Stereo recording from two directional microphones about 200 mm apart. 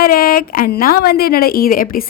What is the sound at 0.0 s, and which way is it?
A woman's voice, 50° left (ahead or behind).